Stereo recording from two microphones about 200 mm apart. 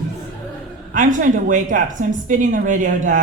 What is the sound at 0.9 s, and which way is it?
A woman's voice, 40° right (ahead or behind).